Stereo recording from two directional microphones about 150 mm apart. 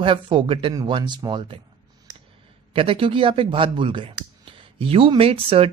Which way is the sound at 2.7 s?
35° right (ahead or behind).